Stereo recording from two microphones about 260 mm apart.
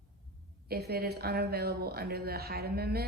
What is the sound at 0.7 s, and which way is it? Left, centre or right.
A woman's voice, right.